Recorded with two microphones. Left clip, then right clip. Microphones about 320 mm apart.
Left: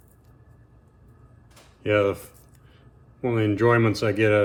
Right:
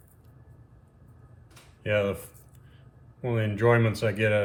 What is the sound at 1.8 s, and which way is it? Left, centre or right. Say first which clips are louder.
Speech: left 5 dB; centre.